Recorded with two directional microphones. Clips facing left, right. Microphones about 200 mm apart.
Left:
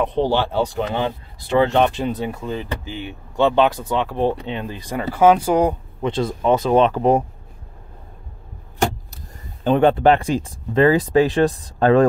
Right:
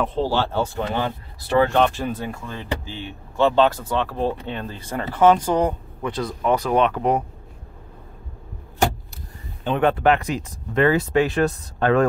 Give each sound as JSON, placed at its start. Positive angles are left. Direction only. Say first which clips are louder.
{"t": 0.0, "sound": "speech", "louder": "left 3 dB", "side_deg": 20}
{"t": 6.0, "sound": "speech", "louder": "left 4 dB", "side_deg": 25}
{"t": 9.7, "sound": "speech", "louder": "left 4 dB", "side_deg": 30}